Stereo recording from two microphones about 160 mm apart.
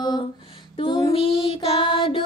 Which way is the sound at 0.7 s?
35° left (ahead or behind).